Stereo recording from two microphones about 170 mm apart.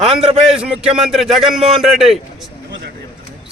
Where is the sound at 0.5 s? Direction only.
5° right (ahead or behind).